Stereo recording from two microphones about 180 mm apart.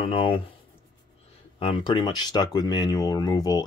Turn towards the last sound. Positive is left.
turn(degrees=20)  # may be behind; listen again after turning